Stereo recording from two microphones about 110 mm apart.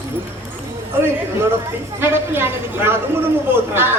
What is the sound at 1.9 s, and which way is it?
A woman's voice, 20° right (ahead or behind).